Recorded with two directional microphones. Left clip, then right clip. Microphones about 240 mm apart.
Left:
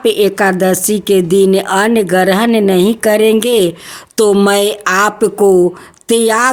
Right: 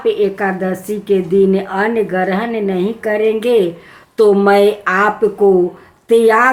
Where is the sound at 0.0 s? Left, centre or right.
Left.